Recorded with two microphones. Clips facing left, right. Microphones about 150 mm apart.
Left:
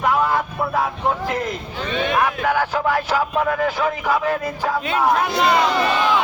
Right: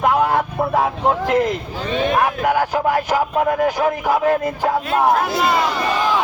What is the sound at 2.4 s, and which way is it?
Speech, 15° right (ahead or behind).